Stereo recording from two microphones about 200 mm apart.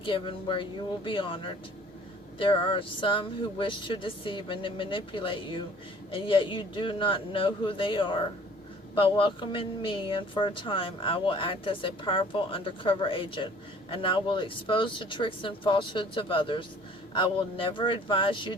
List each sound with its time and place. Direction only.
0.0 s speech: 25° left (ahead or behind)